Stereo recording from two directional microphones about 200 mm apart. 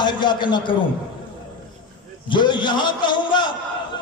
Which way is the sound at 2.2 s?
25° left (ahead or behind).